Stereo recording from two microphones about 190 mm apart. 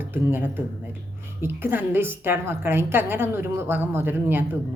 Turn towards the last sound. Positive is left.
turn(degrees=-10)  # may be behind; listen again after turning